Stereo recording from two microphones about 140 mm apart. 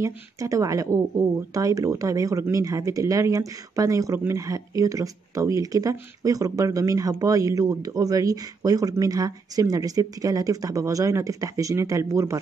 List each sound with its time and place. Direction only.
0.0 s speech: 25° right (ahead or behind)